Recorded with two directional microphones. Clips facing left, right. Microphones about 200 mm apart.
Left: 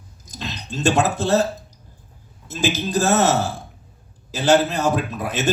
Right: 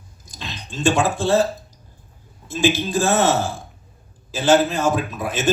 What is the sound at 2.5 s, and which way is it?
A man's voice, 40° left (ahead or behind).